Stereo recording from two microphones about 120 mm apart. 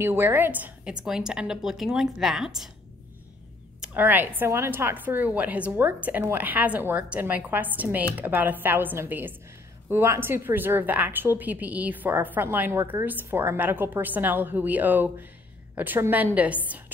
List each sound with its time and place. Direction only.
0.0 s a woman's voice: 20° right (ahead or behind); by 2.7 s 5° right (ahead or behind)
3.8 s speech: 15° right (ahead or behind)